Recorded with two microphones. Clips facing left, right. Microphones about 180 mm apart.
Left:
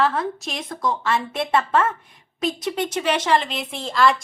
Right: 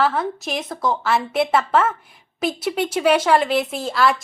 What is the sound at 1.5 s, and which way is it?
Speech, 90° right.